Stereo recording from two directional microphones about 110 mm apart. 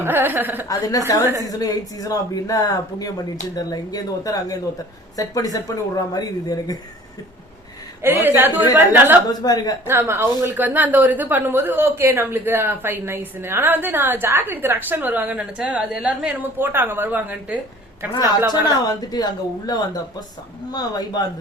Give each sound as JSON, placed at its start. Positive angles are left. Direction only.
{"t": 0.0, "sound": "a woman's voice", "side_deg": -20}
{"t": 0.7, "sound": "speech", "side_deg": 30}
{"t": 8.0, "sound": "a woman's voice", "side_deg": -20}
{"t": 9.3, "sound": "speech", "side_deg": 35}
{"t": 9.8, "sound": "a woman's voice", "side_deg": -20}
{"t": 18.1, "sound": "speech", "side_deg": 40}